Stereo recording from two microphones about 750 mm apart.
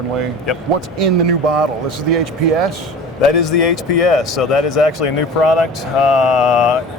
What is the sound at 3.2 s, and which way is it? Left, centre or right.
A man's voice, left.